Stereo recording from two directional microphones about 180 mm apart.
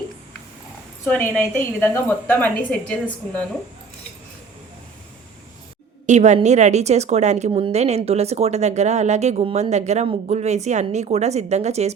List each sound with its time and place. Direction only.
1.0 s a woman's voice: 10° left (ahead or behind)
6.1 s a woman's voice: 40° right (ahead or behind)